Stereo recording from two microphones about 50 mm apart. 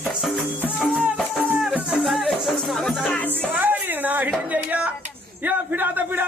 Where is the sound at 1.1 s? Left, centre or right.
Centre.